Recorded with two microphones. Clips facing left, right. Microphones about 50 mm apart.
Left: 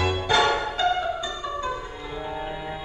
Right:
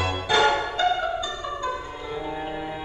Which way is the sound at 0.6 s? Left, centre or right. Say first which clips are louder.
Right 1 dB; centre.